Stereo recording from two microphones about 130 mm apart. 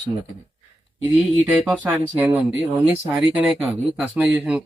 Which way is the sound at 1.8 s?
15° right (ahead or behind).